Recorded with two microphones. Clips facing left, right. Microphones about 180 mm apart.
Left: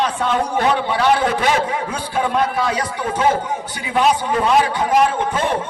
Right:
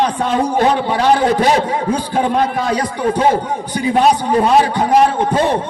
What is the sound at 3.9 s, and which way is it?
Speech, 40° right (ahead or behind).